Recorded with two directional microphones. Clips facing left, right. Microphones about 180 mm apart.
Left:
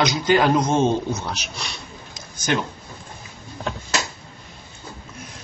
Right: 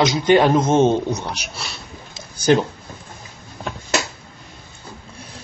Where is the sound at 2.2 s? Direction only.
35° right (ahead or behind).